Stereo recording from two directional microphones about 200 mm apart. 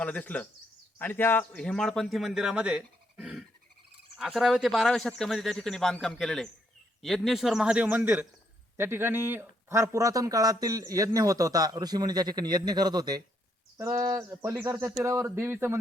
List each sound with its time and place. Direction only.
0.0 s a man's voice: 5° left (ahead or behind); by 15.8 s 10° right (ahead or behind)